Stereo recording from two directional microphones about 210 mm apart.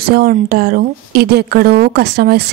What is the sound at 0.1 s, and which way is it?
A woman's voice, 45° right (ahead or behind).